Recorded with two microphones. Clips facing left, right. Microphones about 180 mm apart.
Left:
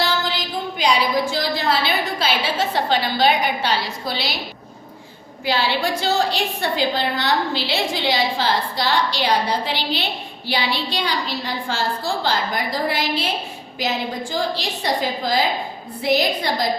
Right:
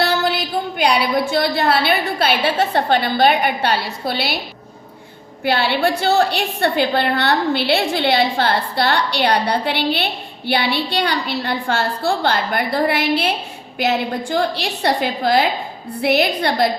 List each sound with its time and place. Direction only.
0.0 s a sound: 65° right (ahead or behind)
1.3 s a woman's voice: 60° right (ahead or behind)
5.5 s a woman's voice: 60° right (ahead or behind)